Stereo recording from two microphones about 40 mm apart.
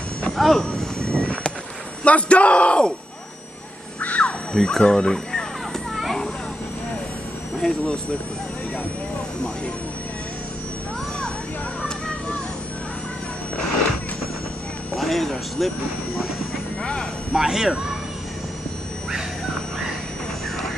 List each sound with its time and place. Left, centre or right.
0.3 s speech: centre
1.1 s a sound: left
2.0 s a man's voice: left
4.0 s a sound: left
4.6 s speech: centre
7.6 s speech: centre
15.0 s speech: centre
16.8 s speech: centre
17.3 s speech: centre